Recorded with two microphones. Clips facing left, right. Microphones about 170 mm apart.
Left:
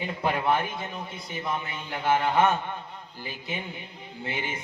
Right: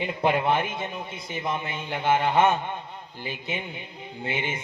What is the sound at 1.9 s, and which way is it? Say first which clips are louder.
Speech: right 1 dB; 20° right (ahead or behind).